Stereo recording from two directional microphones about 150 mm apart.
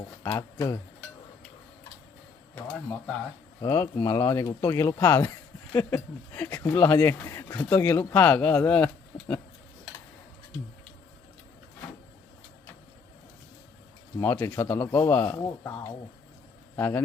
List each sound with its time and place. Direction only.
0.2 s speech: 25° left (ahead or behind)
3.6 s speech: 20° left (ahead or behind)
14.2 s speech: 15° left (ahead or behind)
15.4 s speech: 25° left (ahead or behind)